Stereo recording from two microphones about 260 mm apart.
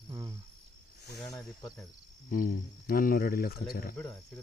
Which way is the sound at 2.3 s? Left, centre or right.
Left.